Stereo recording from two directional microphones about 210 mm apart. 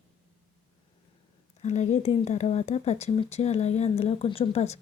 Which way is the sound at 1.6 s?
35° left (ahead or behind).